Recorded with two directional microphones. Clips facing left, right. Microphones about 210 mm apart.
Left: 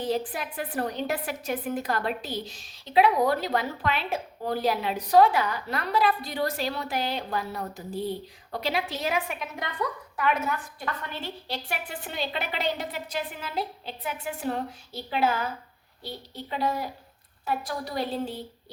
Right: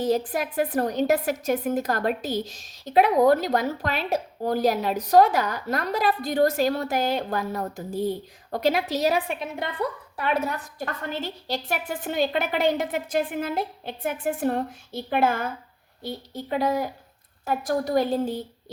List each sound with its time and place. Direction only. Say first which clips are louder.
0.0 s a woman's voice: right 5 dB; 45° right (ahead or behind)